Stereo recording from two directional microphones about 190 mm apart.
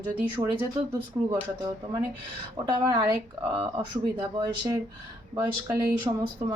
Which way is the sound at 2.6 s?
20° right (ahead or behind).